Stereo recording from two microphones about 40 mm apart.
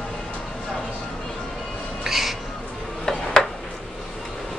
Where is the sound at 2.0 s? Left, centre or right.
Centre.